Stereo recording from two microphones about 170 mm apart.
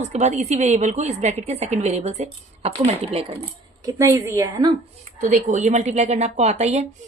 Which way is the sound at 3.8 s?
20° right (ahead or behind).